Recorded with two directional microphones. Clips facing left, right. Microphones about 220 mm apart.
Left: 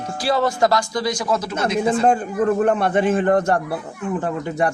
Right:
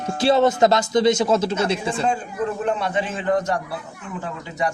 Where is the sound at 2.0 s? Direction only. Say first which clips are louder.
Left 6 dB; 55° left (ahead or behind).